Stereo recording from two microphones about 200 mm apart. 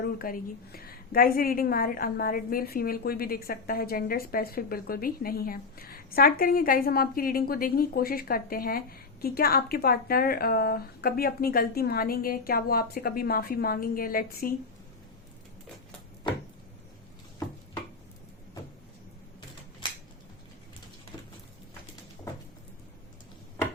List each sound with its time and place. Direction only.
0.0 s a woman's voice: 50° left (ahead or behind)
19.8 s scissors: 25° left (ahead or behind)